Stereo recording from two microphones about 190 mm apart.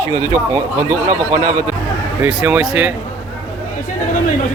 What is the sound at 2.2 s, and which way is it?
Speech, 5° right (ahead or behind).